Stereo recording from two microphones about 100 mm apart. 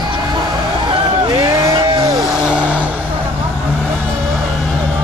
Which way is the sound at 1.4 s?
35° right (ahead or behind).